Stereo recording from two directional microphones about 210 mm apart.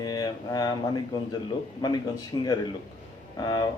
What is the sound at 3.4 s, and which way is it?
Speech, 20° left (ahead or behind).